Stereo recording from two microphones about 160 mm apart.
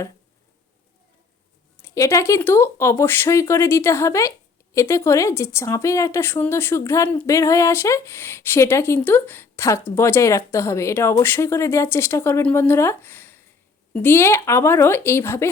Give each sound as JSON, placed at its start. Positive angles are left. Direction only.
{"t": 1.7, "sound": "speech", "side_deg": 15}